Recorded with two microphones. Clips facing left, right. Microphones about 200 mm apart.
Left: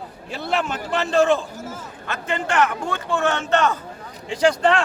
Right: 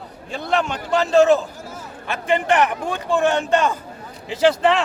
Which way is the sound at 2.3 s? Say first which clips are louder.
Right 3 dB; 15° right (ahead or behind).